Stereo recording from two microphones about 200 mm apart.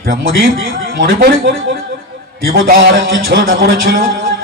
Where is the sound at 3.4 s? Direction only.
50° right (ahead or behind).